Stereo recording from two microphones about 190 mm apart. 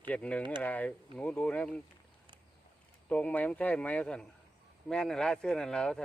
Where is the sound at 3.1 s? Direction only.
10° left (ahead or behind).